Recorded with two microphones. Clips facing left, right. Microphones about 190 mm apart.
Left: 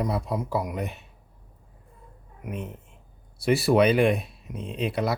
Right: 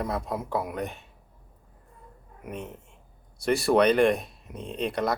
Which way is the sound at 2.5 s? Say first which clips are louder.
Left 2 dB; centre (ahead or behind).